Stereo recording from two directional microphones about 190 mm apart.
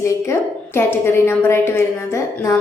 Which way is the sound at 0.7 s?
10° left (ahead or behind).